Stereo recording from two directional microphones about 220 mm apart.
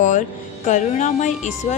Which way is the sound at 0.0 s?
35° left (ahead or behind).